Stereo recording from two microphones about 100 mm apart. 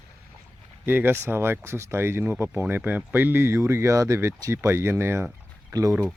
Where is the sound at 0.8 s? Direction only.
20° right (ahead or behind).